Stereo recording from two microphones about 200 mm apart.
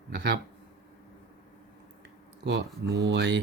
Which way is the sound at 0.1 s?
60° right (ahead or behind).